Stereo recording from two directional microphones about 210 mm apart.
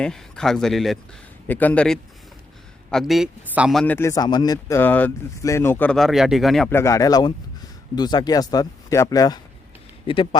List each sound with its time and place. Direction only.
0.0 s a man's voice: 5° left (ahead or behind)
6.7 s a man's voice: 15° left (ahead or behind)